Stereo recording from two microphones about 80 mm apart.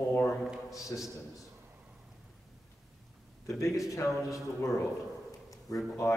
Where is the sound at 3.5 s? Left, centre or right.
Left.